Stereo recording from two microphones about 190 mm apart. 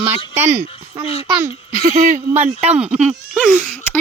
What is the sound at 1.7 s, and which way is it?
Speech, 45° right (ahead or behind).